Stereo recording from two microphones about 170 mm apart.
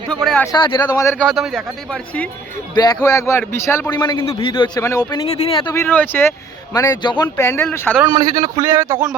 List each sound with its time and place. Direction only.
0.3 s speech: centre (ahead or behind)
0.5 s a man's voice: 25° left (ahead or behind)
1.2 s speech: centre (ahead or behind)
2.7 s a man's voice: 25° left (ahead or behind)
5.3 s speech: 35° left (ahead or behind)
5.7 s speech: 10° left (ahead or behind)
8.1 s a man's voice: 25° right (ahead or behind)
8.6 s speech: 15° right (ahead or behind)